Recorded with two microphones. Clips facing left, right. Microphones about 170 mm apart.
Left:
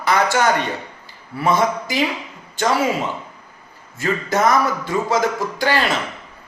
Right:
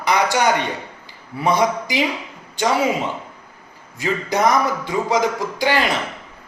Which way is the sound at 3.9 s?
15° right (ahead or behind).